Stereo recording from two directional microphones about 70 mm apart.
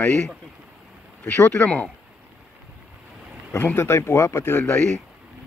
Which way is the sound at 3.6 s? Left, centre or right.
Left.